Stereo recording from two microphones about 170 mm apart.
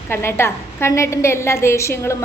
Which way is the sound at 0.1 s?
15° left (ahead or behind).